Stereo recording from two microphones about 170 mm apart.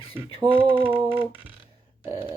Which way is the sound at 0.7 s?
10° right (ahead or behind).